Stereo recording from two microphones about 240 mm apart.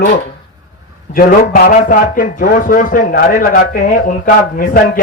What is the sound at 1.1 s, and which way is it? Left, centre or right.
A man's voice, left.